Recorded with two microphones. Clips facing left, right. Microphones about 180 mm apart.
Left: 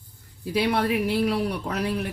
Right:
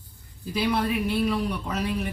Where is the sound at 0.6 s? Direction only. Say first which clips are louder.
Left 2 dB; 65° left (ahead or behind).